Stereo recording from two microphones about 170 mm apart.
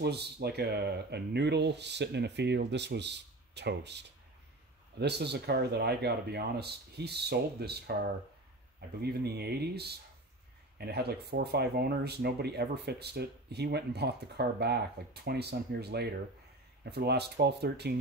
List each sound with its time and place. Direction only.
0.0 s speech: 75° right (ahead or behind)
9.0 s speech: 70° right (ahead or behind)